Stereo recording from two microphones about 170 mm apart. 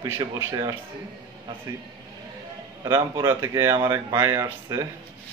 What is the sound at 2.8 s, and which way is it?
A man's voice, 15° right (ahead or behind).